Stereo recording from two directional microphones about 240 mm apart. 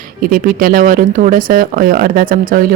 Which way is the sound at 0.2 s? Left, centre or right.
Right.